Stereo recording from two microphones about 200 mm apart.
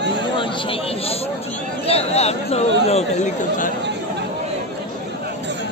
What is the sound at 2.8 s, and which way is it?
Speech, 35° left (ahead or behind).